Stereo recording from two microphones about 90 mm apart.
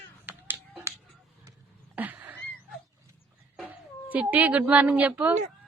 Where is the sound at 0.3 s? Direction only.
20° right (ahead or behind).